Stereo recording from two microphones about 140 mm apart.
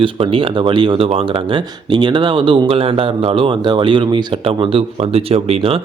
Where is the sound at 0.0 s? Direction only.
40° right (ahead or behind).